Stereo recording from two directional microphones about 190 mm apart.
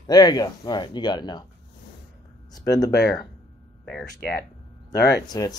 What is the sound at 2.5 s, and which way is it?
Speech, 20° left (ahead or behind).